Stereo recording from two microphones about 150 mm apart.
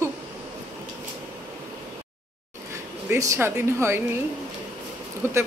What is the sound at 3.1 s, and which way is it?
Speech, 20° right (ahead or behind).